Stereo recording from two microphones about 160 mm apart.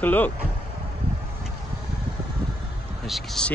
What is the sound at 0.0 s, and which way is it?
Speech, 10° left (ahead or behind).